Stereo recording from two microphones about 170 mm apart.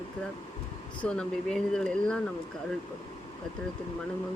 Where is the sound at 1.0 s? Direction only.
5° left (ahead or behind).